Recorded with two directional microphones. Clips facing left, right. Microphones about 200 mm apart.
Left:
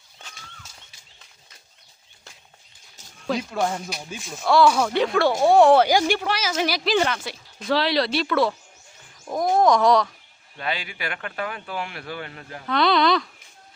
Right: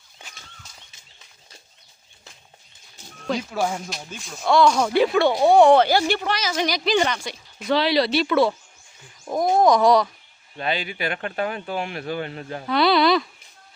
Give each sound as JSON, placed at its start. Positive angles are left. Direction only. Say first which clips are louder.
{"t": 3.2, "sound": "a woman's voice", "louder": "even", "side_deg": 0}
{"t": 9.2, "sound": "wild animals", "louder": "right 2 dB", "side_deg": -5}
{"t": 9.6, "sound": "a woman's voice", "louder": "right 1 dB", "side_deg": -5}
{"t": 10.6, "sound": "speech", "louder": "right 4 dB", "side_deg": -25}
{"t": 12.6, "sound": "speech", "louder": "right 2 dB", "side_deg": -5}